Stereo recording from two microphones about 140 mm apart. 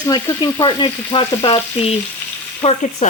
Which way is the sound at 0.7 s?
35° left (ahead or behind).